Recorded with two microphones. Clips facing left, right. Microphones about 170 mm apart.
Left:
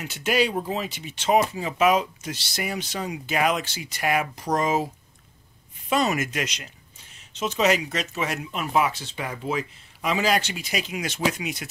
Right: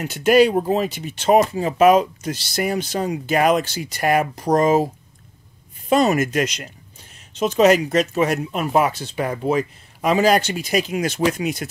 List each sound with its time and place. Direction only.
0.0 s speech: 50° right (ahead or behind)
5.9 s speech: 45° right (ahead or behind)